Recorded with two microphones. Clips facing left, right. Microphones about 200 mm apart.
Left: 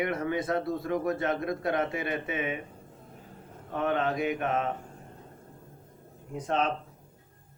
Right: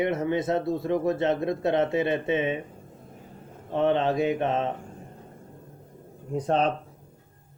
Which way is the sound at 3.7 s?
25° right (ahead or behind).